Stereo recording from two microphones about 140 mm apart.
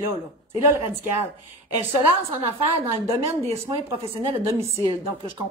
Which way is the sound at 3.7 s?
40° right (ahead or behind).